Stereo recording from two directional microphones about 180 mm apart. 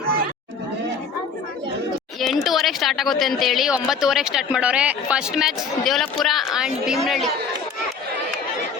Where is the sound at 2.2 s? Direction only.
Centre (ahead or behind).